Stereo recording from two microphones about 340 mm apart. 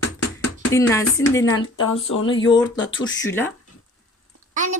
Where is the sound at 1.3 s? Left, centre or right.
Centre.